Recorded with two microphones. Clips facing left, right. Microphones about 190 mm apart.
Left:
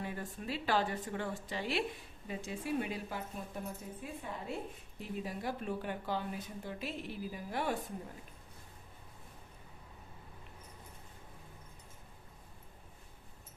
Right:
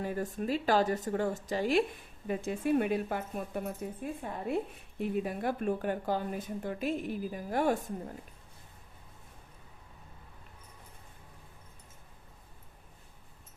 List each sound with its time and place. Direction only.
0.0 s speech: 45° right (ahead or behind)